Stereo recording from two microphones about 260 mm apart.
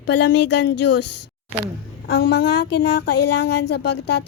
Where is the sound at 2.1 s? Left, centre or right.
Left.